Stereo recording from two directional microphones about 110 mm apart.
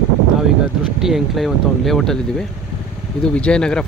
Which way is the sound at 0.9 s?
5° right (ahead or behind).